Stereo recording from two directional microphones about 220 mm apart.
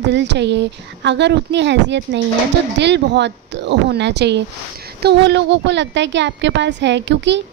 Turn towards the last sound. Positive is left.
turn(degrees=-55)  # may be behind; listen again after turning